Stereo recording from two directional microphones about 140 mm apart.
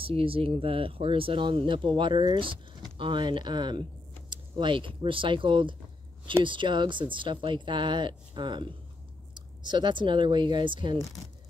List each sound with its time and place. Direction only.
0.0 s speech: 40° right (ahead or behind)
9.7 s speech: 35° right (ahead or behind)